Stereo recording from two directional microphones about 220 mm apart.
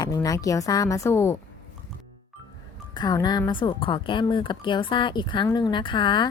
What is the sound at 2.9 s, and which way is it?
A woman's voice, 20° left (ahead or behind).